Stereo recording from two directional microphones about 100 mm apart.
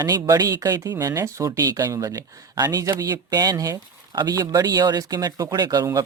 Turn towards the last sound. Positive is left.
turn(degrees=-35)  # may be behind; listen again after turning